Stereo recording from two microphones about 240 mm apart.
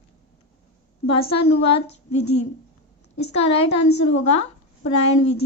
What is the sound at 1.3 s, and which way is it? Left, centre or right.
A woman's voice, left.